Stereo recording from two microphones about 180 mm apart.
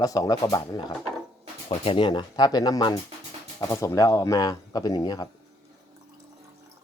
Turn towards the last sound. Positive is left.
turn(degrees=20)  # may be behind; listen again after turning